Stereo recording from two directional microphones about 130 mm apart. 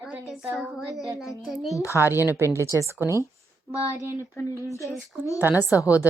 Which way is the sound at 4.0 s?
25° left (ahead or behind).